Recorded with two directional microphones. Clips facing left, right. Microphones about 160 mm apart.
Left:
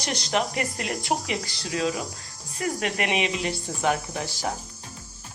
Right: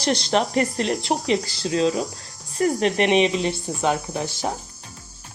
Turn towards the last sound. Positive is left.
turn(degrees=-20)  # may be behind; listen again after turning